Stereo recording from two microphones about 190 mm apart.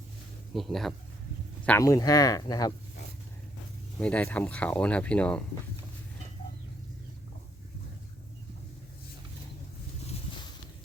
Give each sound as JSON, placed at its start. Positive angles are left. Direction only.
{"t": 0.5, "sound": "speech", "side_deg": 0}
{"t": 1.6, "sound": "speech", "side_deg": 15}
{"t": 4.0, "sound": "speech", "side_deg": 5}